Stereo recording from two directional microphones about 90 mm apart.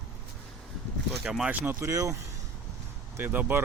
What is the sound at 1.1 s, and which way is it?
Speech, 5° right (ahead or behind).